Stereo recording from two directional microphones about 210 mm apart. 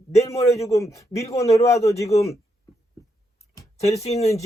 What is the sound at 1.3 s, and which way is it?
Speech, 30° left (ahead or behind).